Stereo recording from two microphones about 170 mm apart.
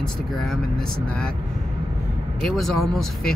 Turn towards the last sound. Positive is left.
turn(degrees=0)  # may be behind; listen again after turning